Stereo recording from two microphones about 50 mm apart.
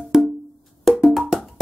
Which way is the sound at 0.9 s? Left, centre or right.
Centre.